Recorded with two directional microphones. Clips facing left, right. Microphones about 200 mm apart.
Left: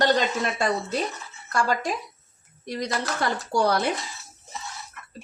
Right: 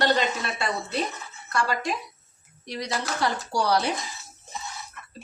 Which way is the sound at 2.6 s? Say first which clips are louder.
Left 2 dB; 50° left (ahead or behind).